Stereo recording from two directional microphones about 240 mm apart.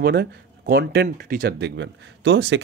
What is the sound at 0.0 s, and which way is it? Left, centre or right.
Speech, right.